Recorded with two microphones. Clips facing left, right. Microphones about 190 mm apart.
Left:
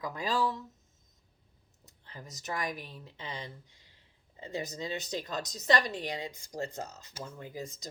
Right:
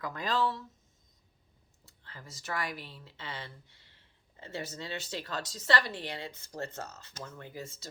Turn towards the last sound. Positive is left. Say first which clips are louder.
# left 2 dB
turn(degrees=15)  # may be behind; listen again after turning